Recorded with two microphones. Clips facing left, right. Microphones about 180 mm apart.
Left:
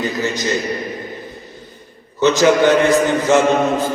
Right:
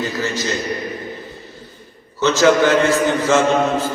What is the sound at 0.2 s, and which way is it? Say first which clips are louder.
Speech: left 2 dB; 15° left (ahead or behind).